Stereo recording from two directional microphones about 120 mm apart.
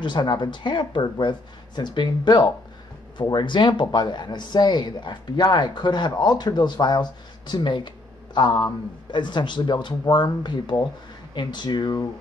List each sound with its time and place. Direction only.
0.0 s speech: 40° left (ahead or behind)